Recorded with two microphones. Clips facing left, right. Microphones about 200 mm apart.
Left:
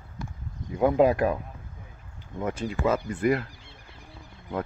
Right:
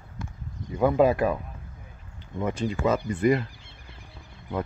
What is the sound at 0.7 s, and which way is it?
Speech, 15° left (ahead or behind).